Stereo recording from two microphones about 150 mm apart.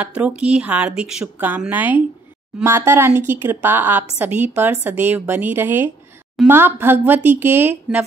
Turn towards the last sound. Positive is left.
turn(degrees=-15)  # may be behind; listen again after turning